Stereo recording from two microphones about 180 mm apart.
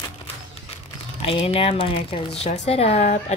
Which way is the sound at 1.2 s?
30° left (ahead or behind).